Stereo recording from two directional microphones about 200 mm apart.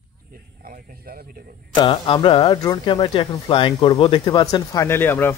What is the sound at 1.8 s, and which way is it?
Speech, 25° left (ahead or behind).